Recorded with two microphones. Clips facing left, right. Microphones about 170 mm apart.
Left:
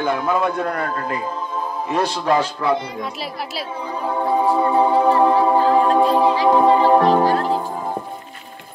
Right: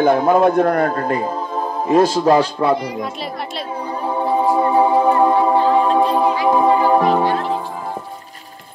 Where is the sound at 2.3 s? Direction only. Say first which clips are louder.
Right 4 dB; 30° right (ahead or behind).